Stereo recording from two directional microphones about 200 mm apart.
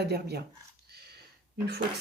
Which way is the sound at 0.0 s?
55° right (ahead or behind).